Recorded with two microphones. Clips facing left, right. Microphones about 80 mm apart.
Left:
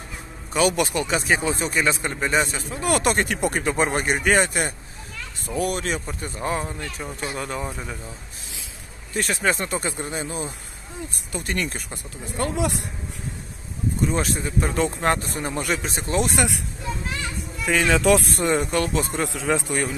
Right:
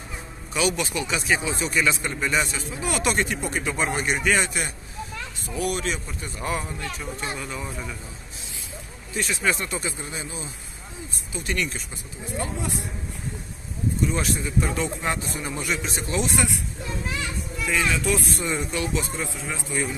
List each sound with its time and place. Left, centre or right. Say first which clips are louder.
0.5 s speech: left 4 dB; left
7.3 s speech: left 4 dB; left
7.6 s speech: left 2 dB; left
9.1 s speech: left 2 dB; left
12.4 s speech: left 6 dB; left
14.0 s speech: left 3 dB; left
16.3 s speech: left 2 dB; left
17.6 s speech: left 6 dB; left
18.3 s speech: left 6 dB; left
19.2 s a man's voice: left 8 dB; left